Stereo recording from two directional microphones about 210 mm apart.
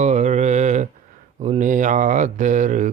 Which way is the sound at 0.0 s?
35° right (ahead or behind).